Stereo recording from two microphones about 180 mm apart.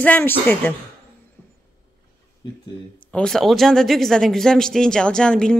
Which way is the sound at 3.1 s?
Centre (ahead or behind).